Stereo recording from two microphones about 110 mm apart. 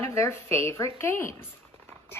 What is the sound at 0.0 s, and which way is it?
Speech, 25° left (ahead or behind).